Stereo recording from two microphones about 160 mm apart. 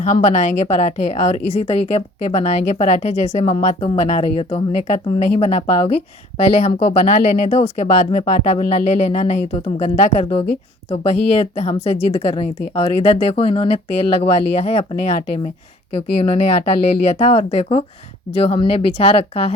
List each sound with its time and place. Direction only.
0.0 s a woman's voice: 45° left (ahead or behind)